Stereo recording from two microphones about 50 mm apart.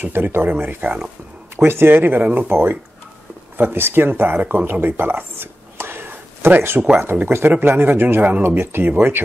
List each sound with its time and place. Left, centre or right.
0.0 s a man's voice: right